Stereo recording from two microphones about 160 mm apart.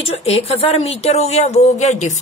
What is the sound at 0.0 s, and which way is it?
A woman's voice, 40° left (ahead or behind).